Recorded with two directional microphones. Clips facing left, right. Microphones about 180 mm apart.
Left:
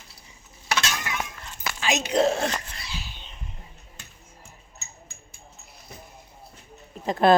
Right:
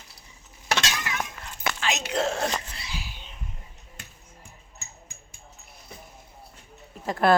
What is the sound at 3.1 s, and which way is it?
Cough, 5° right (ahead or behind).